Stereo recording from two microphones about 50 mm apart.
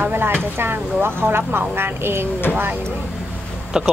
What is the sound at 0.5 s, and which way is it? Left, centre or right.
Speech, right.